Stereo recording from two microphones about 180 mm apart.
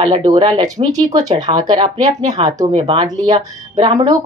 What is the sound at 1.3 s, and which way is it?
Speech, 20° right (ahead or behind).